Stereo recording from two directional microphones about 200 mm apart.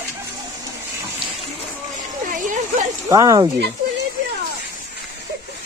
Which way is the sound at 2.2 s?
40° right (ahead or behind).